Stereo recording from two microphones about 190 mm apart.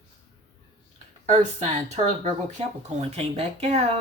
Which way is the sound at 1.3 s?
35° right (ahead or behind).